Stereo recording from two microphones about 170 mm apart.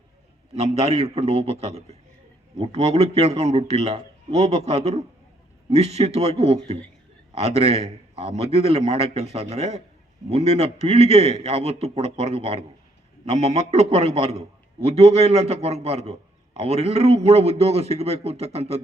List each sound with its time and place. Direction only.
0.5 s a man's voice: 40° right (ahead or behind)